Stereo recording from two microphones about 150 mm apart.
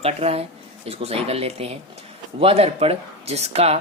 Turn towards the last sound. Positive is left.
turn(degrees=-45)  # may be behind; listen again after turning